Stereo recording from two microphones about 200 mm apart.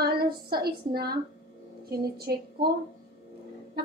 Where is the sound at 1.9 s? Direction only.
50° right (ahead or behind).